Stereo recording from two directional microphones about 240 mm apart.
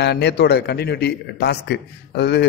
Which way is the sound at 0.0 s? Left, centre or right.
Left.